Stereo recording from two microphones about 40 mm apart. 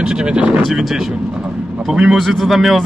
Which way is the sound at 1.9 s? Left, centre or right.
Centre.